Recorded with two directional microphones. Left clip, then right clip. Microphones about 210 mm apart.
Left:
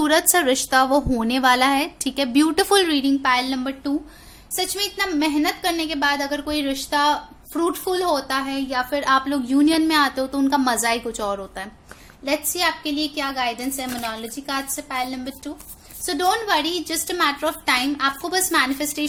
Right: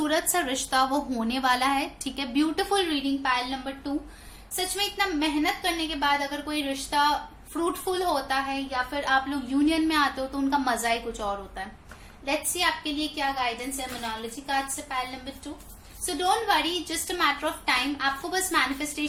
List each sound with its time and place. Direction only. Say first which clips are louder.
0.0 s a woman's voice: left 8 dB; 50° left (ahead or behind)